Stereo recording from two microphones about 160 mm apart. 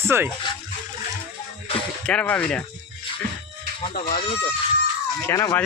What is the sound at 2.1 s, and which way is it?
Speech, 10° left (ahead or behind).